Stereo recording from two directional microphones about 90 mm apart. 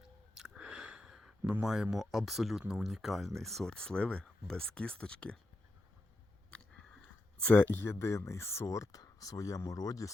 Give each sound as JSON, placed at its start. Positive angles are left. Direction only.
{"t": 0.3, "sound": "a sound", "side_deg": -10}
{"t": 1.6, "sound": "speech", "side_deg": -5}
{"t": 7.4, "sound": "speech", "side_deg": 20}